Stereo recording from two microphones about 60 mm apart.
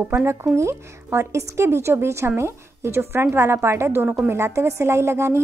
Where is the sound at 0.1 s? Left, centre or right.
Right.